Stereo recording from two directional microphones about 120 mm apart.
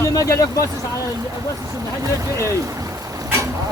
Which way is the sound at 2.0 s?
25° right (ahead or behind).